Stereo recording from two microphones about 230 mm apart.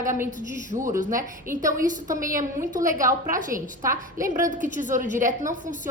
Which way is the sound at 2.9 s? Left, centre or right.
Centre.